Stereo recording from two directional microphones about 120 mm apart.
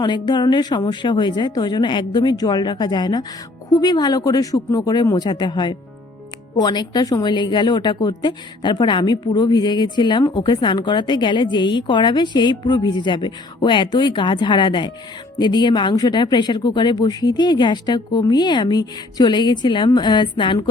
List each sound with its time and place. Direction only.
0.0 s a woman's voice: 40° left (ahead or behind)